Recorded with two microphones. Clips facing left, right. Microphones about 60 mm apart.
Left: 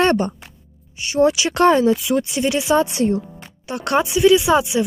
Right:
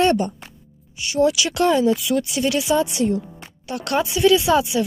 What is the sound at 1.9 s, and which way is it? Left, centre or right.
Speech, left.